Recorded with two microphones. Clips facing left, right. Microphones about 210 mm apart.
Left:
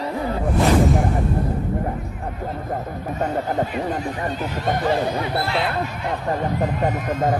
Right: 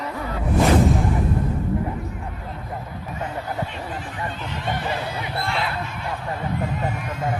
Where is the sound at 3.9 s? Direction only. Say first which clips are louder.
Left 6 dB; 40° left (ahead or behind).